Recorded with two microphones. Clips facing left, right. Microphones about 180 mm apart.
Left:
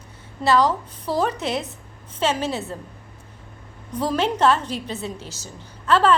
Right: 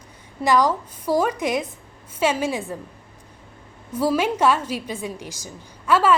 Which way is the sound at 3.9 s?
10° right (ahead or behind).